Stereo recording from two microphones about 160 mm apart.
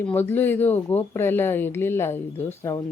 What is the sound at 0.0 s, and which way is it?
Speech, 10° left (ahead or behind).